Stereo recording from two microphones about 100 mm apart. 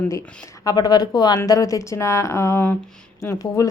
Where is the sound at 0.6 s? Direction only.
40° left (ahead or behind).